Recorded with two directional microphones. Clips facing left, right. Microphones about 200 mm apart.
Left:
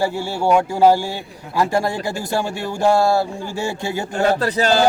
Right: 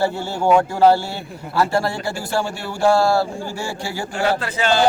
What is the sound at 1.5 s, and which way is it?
Speech, 15° left (ahead or behind).